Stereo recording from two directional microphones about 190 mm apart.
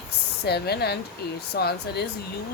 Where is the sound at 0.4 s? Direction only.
55° left (ahead or behind).